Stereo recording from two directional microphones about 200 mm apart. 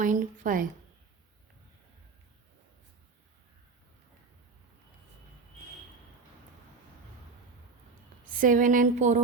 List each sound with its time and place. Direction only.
0.0 s speech: 40° right (ahead or behind)
8.3 s speech: 40° right (ahead or behind)